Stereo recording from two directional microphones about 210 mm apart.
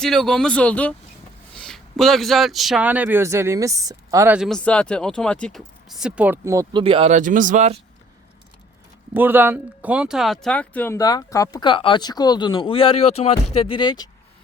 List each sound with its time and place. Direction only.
0.0 s a man's voice: 5° left (ahead or behind); by 4.4 s 15° right (ahead or behind)
4.4 s speech: centre (ahead or behind); by 6.8 s 15° right (ahead or behind)
6.8 s speech: 30° right (ahead or behind)
9.1 s speech: 10° right (ahead or behind); by 14.1 s 20° left (ahead or behind)